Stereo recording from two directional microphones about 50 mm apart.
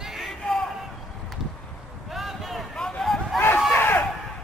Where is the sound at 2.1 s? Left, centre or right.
Centre.